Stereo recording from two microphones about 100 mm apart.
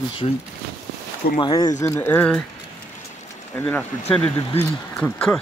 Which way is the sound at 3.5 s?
15° left (ahead or behind).